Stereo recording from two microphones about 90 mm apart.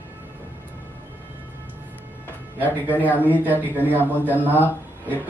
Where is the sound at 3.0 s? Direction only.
20° left (ahead or behind).